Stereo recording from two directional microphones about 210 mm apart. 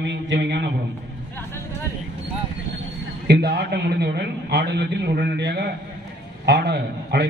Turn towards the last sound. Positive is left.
turn(degrees=-55)  # may be behind; listen again after turning